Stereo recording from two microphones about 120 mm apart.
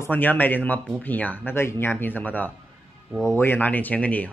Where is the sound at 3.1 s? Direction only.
Centre (ahead or behind).